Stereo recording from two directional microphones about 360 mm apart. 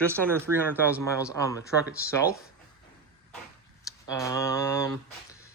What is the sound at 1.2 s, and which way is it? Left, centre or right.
Speech, centre.